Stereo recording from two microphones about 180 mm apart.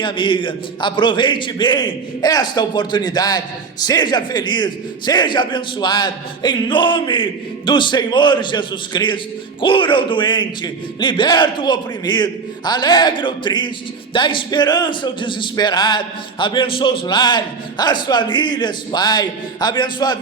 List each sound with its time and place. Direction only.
0.0 s a man's voice: 25° left (ahead or behind)